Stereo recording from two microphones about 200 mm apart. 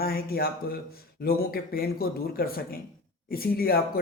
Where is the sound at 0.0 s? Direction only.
50° left (ahead or behind).